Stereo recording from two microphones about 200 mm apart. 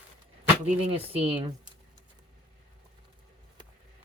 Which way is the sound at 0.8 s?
30° right (ahead or behind).